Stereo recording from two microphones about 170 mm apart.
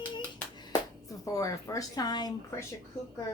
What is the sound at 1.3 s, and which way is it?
Speech, 20° left (ahead or behind).